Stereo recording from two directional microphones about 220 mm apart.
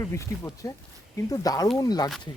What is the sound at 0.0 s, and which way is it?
Speech, 15° left (ahead or behind).